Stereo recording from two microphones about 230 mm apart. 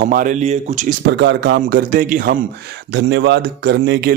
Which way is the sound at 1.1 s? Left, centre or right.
Right.